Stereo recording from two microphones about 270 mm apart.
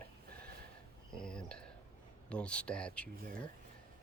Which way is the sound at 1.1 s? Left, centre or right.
Centre.